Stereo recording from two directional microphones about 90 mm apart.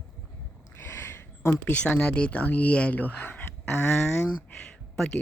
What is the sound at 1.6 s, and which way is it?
Speech, 15° left (ahead or behind).